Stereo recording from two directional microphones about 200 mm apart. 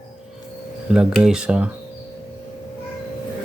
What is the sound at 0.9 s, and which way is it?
Speech, 5° right (ahead or behind).